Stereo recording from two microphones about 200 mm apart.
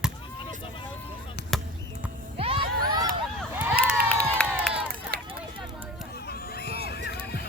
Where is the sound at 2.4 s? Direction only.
25° right (ahead or behind).